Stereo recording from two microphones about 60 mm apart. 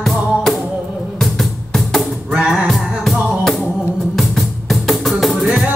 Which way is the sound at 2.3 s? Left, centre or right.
Centre.